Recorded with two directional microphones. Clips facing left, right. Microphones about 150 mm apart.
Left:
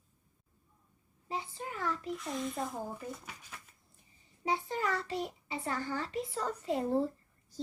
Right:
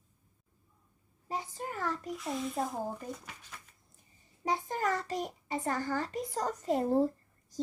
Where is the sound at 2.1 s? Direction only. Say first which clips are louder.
Right 1 dB; centre (ahead or behind).